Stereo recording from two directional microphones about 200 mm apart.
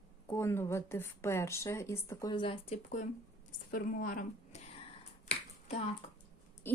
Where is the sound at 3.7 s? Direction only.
45° left (ahead or behind).